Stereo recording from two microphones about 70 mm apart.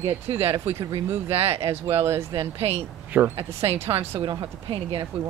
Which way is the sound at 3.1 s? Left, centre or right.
Right.